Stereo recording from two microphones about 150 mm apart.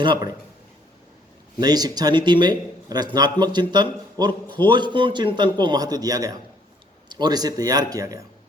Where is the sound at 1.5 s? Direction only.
25° right (ahead or behind).